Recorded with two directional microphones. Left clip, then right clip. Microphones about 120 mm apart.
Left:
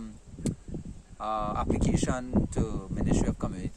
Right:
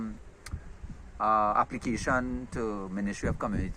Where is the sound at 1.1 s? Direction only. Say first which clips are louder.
Right 6 dB; 10° left (ahead or behind).